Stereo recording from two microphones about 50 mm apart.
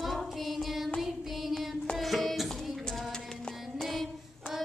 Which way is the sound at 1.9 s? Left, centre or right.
Centre.